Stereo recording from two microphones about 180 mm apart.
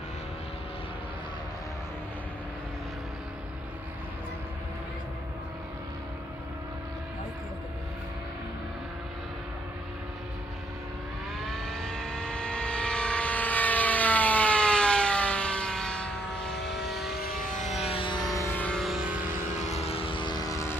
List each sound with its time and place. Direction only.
11.4 s vehicle: centre (ahead or behind)
17.2 s vehicle: 55° left (ahead or behind)
17.9 s music: 25° left (ahead or behind); by 19.1 s centre (ahead or behind)
19.2 s vehicle: 40° left (ahead or behind); by 20.7 s 20° left (ahead or behind)